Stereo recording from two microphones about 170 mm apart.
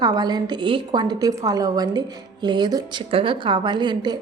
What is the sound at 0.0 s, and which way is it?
A woman's voice, 25° right (ahead or behind).